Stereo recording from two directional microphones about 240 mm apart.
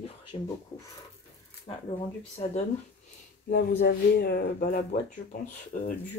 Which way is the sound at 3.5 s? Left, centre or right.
Left.